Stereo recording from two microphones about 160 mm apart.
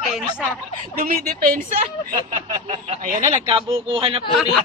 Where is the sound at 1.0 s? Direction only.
65° right (ahead or behind).